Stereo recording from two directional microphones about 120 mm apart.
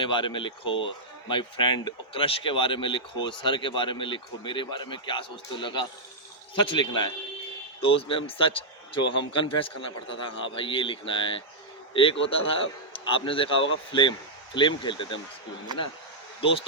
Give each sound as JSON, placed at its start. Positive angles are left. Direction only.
{"t": 0.0, "sound": "speech", "side_deg": 45}
{"t": 16.4, "sound": "speech", "side_deg": 50}